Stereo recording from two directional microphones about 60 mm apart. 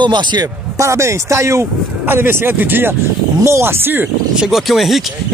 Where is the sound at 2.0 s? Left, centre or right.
Right.